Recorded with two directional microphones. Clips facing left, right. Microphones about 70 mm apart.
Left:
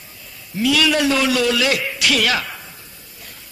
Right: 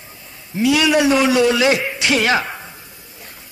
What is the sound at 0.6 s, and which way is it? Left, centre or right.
A man's voice, right.